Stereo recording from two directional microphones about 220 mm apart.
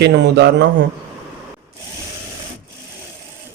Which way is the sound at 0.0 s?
50° right (ahead or behind).